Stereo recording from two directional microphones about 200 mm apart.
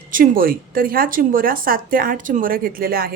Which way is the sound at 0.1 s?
45° right (ahead or behind).